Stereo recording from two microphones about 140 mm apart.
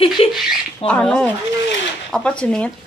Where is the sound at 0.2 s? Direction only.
45° left (ahead or behind).